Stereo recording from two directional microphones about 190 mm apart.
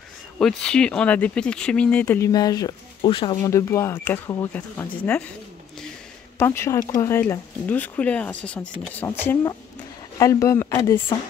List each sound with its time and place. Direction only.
0.4 s speech: 5° left (ahead or behind)
6.3 s speech: 15° left (ahead or behind)